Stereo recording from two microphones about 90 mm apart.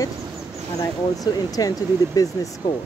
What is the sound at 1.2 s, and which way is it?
Speech, 45° left (ahead or behind).